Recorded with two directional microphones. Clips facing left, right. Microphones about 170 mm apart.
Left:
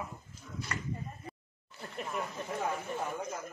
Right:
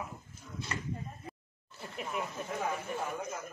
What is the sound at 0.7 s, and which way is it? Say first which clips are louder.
Speech: right 1 dB; 25° right (ahead or behind).